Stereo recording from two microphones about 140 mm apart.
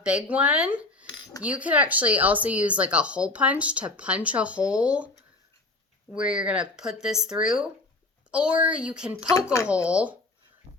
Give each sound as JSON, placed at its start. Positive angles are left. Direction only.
{"t": 0.0, "sound": "speech", "side_deg": -5}
{"t": 9.2, "sound": "speech", "side_deg": 25}
{"t": 9.9, "sound": "speech", "side_deg": -10}